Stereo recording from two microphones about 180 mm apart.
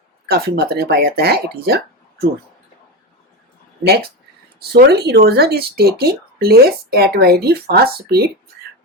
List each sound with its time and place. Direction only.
0.3 s speech: 60° right (ahead or behind)
4.7 s speech: 65° right (ahead or behind)